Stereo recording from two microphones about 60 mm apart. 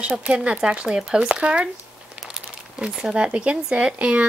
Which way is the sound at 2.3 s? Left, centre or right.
Centre.